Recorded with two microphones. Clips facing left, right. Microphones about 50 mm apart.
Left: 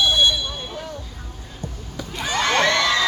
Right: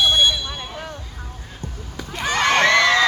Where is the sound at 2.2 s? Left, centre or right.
Right.